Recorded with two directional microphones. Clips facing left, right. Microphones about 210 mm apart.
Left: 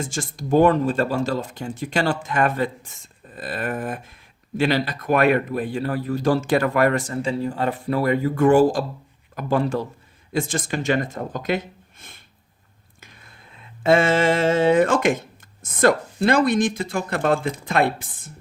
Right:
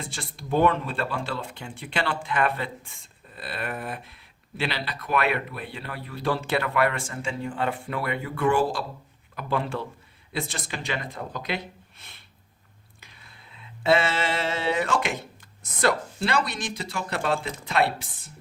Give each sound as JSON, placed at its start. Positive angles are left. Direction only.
{"t": 0.0, "sound": "speech", "side_deg": 45}
{"t": 13.0, "sound": "a sound", "side_deg": 50}
{"t": 15.6, "sound": "speech", "side_deg": 50}